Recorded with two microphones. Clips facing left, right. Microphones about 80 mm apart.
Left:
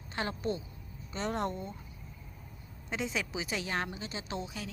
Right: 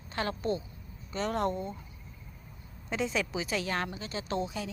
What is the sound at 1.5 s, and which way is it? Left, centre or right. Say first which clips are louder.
Speech: right 5 dB; right.